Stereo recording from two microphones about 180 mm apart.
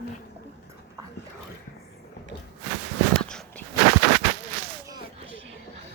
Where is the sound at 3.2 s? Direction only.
5° left (ahead or behind).